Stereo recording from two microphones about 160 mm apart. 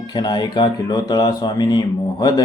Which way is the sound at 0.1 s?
25° left (ahead or behind).